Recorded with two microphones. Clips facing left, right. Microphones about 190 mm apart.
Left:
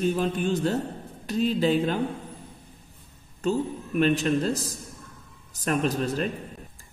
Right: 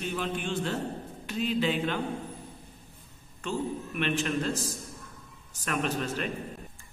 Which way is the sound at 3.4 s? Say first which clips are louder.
Left 6 dB; 40° left (ahead or behind).